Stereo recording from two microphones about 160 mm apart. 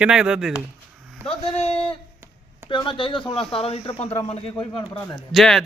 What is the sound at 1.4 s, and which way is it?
Speech, 40° left (ahead or behind).